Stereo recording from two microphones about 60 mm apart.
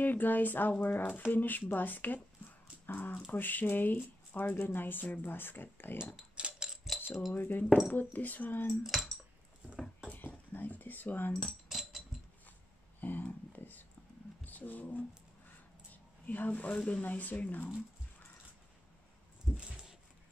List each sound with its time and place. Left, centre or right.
0.0 s speech: left
6.1 s keys jangling: centre
6.7 s keys jangling: centre
7.0 s keys jangling: left
7.3 s speech: left
8.8 s speech: centre
10.1 s a sound: left
11.4 s cutlery: centre
13.0 s a sound: left
19.5 s a sound: centre